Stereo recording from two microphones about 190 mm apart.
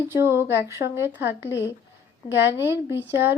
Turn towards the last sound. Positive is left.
turn(degrees=-10)  # may be behind; listen again after turning